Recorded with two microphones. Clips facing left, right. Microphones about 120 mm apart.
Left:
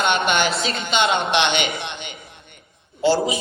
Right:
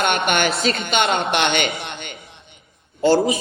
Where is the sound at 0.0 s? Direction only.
55° right (ahead or behind).